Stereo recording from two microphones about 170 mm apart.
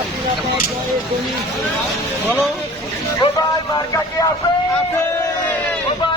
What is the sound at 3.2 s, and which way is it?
Speech, 25° left (ahead or behind).